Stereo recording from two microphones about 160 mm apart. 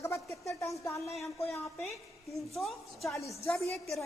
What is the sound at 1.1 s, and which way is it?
A woman's voice, centre (ahead or behind).